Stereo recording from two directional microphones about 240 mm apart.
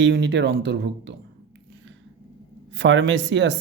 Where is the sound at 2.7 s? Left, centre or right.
Right.